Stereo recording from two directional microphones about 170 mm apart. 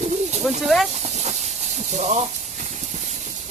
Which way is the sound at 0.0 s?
40° right (ahead or behind).